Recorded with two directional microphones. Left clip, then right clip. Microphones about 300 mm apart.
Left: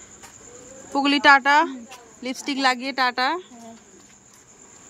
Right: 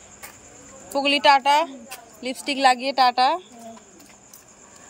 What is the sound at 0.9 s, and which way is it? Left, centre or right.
Speech, centre.